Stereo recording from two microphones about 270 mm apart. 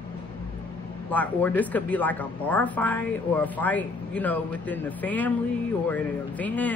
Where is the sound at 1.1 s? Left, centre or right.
Centre.